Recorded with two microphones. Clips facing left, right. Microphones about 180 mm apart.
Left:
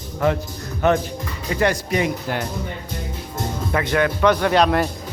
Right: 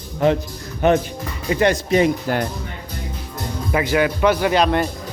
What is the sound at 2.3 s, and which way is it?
Speech, 45° right (ahead or behind).